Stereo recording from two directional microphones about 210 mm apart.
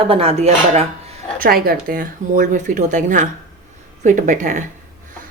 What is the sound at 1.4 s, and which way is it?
A woman's voice, 45° right (ahead or behind).